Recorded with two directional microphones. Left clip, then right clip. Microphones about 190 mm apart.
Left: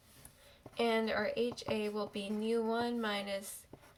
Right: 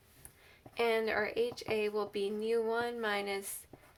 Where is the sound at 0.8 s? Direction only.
35° right (ahead or behind).